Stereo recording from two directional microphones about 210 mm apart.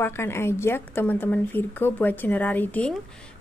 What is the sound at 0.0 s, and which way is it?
A woman's voice, 10° left (ahead or behind).